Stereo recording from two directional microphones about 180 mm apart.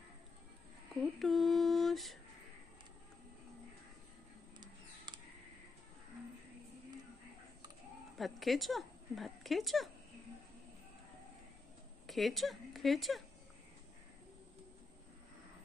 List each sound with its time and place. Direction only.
1.2 s lullaby: centre (ahead or behind)
4.6 s a sound: 25° right (ahead or behind)
8.2 s speech: centre (ahead or behind)
12.1 s speech: centre (ahead or behind)